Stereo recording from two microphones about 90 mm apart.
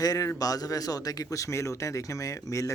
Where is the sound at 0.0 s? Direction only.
45° left (ahead or behind).